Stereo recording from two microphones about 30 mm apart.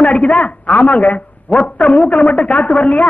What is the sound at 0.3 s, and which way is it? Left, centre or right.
A man's voice, left.